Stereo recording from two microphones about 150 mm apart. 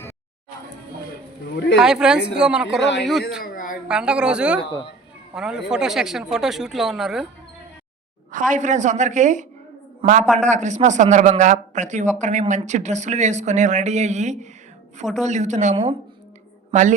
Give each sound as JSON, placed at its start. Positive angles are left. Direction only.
{"t": 1.7, "sound": "speech", "side_deg": -5}
{"t": 3.4, "sound": "a sound", "side_deg": 70}
{"t": 3.8, "sound": "a woman's voice", "side_deg": -5}
{"t": 8.3, "sound": "a woman's voice", "side_deg": -60}
{"t": 15.7, "sound": "speech", "side_deg": -35}